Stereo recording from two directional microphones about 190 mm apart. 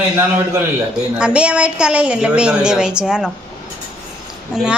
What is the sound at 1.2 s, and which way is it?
A woman's voice, 5° right (ahead or behind).